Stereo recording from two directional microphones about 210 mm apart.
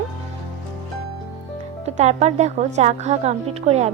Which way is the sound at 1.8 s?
30° right (ahead or behind).